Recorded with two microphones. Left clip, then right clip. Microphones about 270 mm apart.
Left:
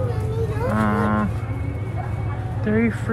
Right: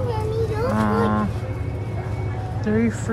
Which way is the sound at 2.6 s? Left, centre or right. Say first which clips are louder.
Left 1 dB; centre.